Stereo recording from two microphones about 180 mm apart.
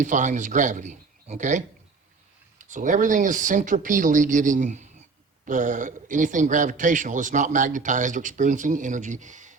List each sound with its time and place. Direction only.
0.0 s a man's voice: 45° right (ahead or behind)